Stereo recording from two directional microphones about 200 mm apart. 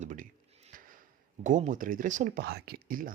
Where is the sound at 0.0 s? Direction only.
40° right (ahead or behind).